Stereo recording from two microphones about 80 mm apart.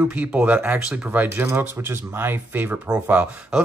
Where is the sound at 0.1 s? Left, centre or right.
Centre.